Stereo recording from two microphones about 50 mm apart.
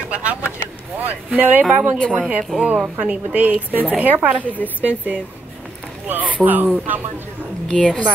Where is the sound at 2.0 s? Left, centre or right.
Centre.